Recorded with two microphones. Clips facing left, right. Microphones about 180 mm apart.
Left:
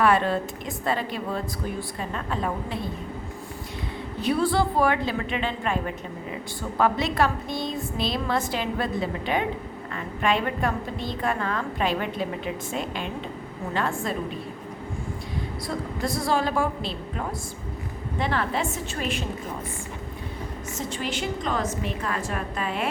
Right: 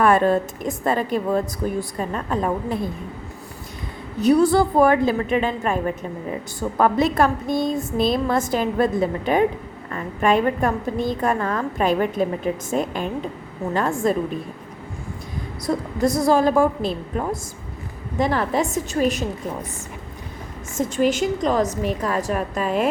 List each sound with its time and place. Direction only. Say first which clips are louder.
0.0 s a woman's voice: right 5 dB; 45° right (ahead or behind)
4.2 s a woman's voice: right 7 dB; 45° right (ahead or behind)
6.7 s a woman's voice: right 5 dB; 45° right (ahead or behind)
16.2 s a woman's voice: right 7 dB; 45° right (ahead or behind)
20.7 s a woman's voice: right 11 dB; 45° right (ahead or behind)